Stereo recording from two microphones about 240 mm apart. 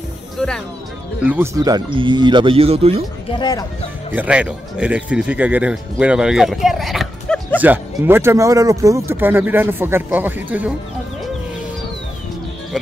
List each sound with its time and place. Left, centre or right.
0.4 s music: centre
1.2 s speech: centre; by 3.0 s right
3.3 s speech: centre
4.1 s speech: centre
7.6 s speech: centre